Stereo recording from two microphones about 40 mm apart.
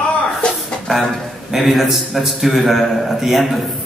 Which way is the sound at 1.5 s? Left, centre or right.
Centre.